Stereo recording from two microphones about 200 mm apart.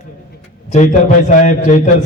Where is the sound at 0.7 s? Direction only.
40° left (ahead or behind).